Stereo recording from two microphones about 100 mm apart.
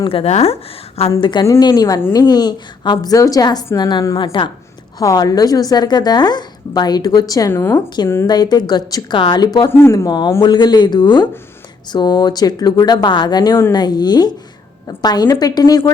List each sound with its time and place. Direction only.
0.1 s a woman's voice: 80° left
1.2 s speech: 50° left (ahead or behind)
1.7 s a woman's voice: 35° left (ahead or behind)
4.2 s speech: 55° left (ahead or behind)
4.9 s a woman's voice: 40° left (ahead or behind)
8.3 s speech: 45° left (ahead or behind)
9.6 s speech: 25° left (ahead or behind)
10.1 s a woman's voice: 50° left (ahead or behind)